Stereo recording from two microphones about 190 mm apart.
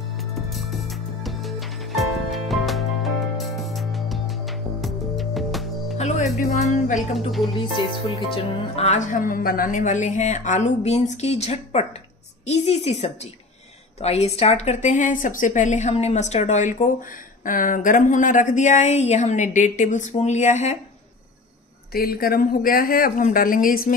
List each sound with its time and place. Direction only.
0.2 s music: centre (ahead or behind)
5.9 s speech: 35° left (ahead or behind)
7.0 s speech: centre (ahead or behind)
8.7 s a woman's voice: 35° left (ahead or behind)
21.9 s speech: 50° left (ahead or behind)